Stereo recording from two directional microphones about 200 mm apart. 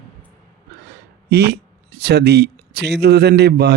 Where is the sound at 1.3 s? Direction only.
55° right (ahead or behind).